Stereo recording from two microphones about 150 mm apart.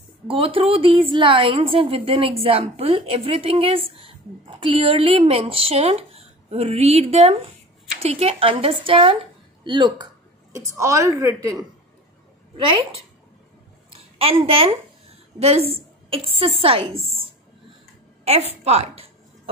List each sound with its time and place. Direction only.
0.3 s a woman's voice: 35° right (ahead or behind)
10.5 s a woman's voice: 20° right (ahead or behind)
12.5 s a woman's voice: 35° right (ahead or behind)
13.8 s a sound: 40° right (ahead or behind)
16.1 s a woman's voice: 40° right (ahead or behind)
18.2 s a sound: 45° right (ahead or behind)